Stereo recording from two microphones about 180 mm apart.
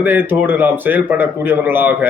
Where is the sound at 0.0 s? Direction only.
10° right (ahead or behind).